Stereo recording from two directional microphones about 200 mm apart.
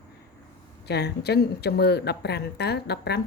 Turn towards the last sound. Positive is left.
turn(degrees=55)  # may be behind; listen again after turning